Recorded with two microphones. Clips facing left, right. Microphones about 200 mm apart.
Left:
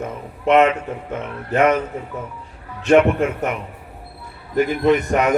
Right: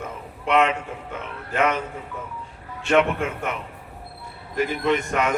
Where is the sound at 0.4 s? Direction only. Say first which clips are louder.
Left 6 dB; 45° left (ahead or behind).